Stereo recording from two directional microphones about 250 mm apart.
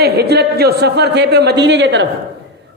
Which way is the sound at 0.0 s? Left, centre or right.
Right.